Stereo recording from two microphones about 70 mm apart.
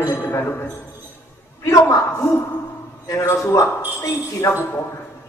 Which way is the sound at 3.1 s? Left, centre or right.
Left.